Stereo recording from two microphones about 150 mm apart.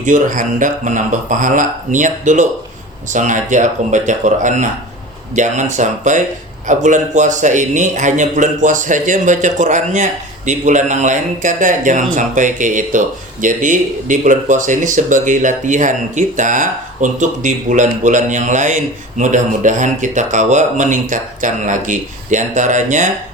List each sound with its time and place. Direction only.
0.0 s speech: 60° right (ahead or behind)